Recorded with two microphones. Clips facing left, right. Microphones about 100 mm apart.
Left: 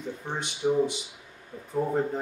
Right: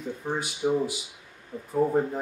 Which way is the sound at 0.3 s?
5° right (ahead or behind).